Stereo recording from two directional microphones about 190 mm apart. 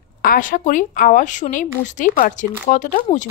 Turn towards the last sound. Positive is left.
turn(degrees=40)  # may be behind; listen again after turning